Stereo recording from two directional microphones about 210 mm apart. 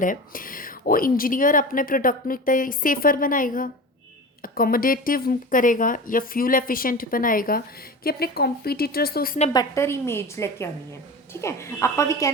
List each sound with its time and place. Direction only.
0.0 s a woman's voice: 40° left (ahead or behind)
9.5 s a woman's voice: 15° left (ahead or behind)